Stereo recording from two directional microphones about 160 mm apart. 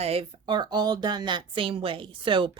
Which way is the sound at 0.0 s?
35° right (ahead or behind).